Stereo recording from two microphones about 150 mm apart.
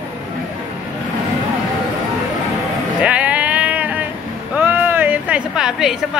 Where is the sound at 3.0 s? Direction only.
10° right (ahead or behind).